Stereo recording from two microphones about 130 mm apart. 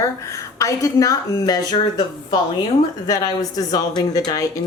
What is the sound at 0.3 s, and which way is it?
A woman's voice, 25° left (ahead or behind).